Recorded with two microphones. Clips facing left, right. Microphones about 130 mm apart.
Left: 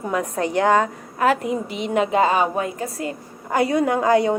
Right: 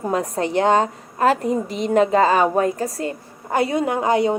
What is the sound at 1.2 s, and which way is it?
A woman's voice, 40° right (ahead or behind).